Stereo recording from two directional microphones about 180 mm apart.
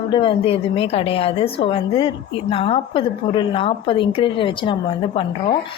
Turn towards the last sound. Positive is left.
turn(degrees=30)  # may be behind; listen again after turning